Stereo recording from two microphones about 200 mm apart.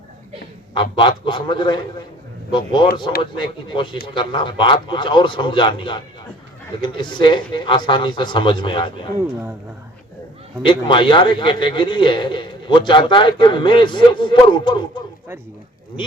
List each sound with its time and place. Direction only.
0.7 s a man's voice: 25° left (ahead or behind)
10.6 s a man's voice: 25° left (ahead or behind)